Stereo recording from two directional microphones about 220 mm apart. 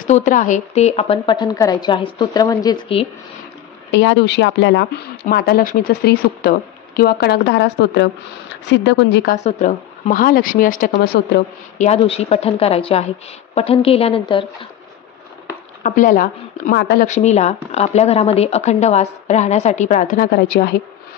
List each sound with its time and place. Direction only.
0.0 s a woman's voice: 35° left (ahead or behind)
3.9 s a woman's voice: 55° left (ahead or behind)
5.3 s speech: 45° left (ahead or behind)
9.3 s a woman's voice: 35° left (ahead or behind)
10.9 s speech: 50° left (ahead or behind)
11.8 s a woman's voice: 30° left (ahead or behind)
15.8 s a woman's voice: 35° left (ahead or behind)
16.7 s speech: 50° left (ahead or behind)
17.0 s a woman's voice: 30° left (ahead or behind)